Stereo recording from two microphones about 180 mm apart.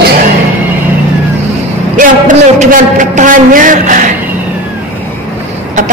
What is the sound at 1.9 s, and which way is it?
A woman's voice, 45° right (ahead or behind).